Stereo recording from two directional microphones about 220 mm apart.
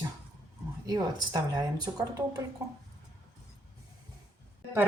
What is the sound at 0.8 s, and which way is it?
Speech, 20° right (ahead or behind).